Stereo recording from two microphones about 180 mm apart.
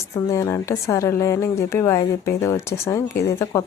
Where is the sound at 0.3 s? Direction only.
15° left (ahead or behind).